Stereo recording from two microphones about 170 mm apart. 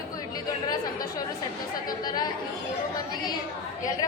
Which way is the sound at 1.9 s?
25° left (ahead or behind).